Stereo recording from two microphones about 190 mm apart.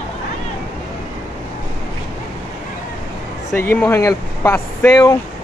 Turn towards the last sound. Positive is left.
turn(degrees=20)  # may be behind; listen again after turning